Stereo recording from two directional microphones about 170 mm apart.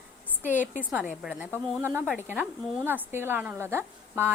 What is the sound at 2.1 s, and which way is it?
A woman's voice, 10° right (ahead or behind).